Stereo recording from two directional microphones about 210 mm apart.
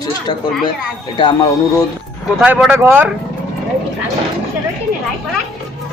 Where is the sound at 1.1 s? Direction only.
20° left (ahead or behind).